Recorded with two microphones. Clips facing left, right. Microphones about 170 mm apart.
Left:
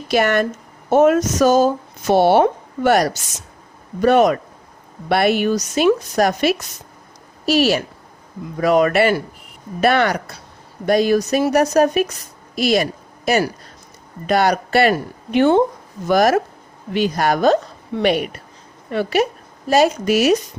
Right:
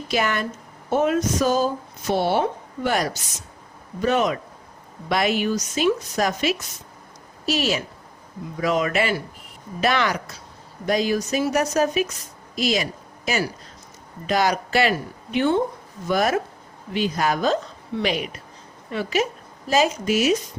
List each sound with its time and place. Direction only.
0.1 s a woman's voice: 70° left (ahead or behind)